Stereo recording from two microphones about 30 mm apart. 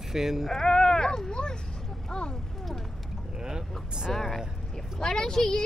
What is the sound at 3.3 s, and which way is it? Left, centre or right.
Boat, right.